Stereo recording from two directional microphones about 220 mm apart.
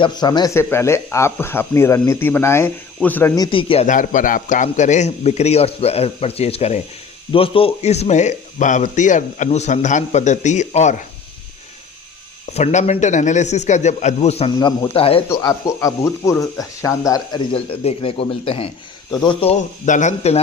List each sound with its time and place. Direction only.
0.0 s speech: 20° left (ahead or behind)
12.5 s speech: 30° left (ahead or behind)
15.3 s speech: 15° left (ahead or behind); by 20.4 s 30° left (ahead or behind)